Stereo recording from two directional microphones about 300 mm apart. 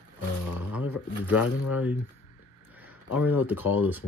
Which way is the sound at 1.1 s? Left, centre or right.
Left.